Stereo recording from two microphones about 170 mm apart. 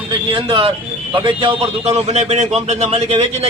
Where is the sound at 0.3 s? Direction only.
30° right (ahead or behind).